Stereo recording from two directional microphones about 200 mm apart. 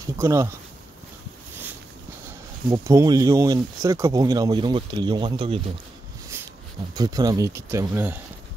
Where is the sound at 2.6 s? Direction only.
15° right (ahead or behind).